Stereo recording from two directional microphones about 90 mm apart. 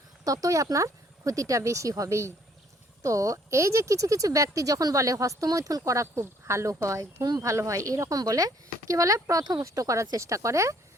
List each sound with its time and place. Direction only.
0.3 s speech: 40° right (ahead or behind)